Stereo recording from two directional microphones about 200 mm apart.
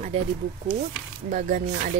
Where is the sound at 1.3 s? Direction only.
40° right (ahead or behind).